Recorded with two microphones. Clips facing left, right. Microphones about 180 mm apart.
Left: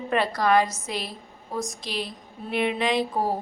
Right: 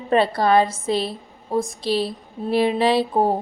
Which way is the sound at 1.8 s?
30° right (ahead or behind).